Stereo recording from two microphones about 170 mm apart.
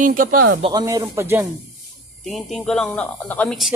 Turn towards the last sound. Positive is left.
turn(degrees=0)  # may be behind; listen again after turning